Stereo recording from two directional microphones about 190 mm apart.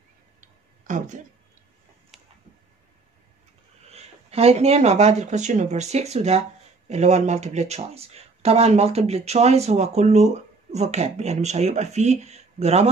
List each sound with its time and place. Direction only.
0.4 s tick-tock: 40° right (ahead or behind)
3.9 s speech: 35° right (ahead or behind)